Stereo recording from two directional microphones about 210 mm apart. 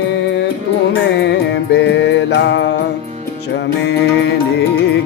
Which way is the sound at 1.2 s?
55° left (ahead or behind).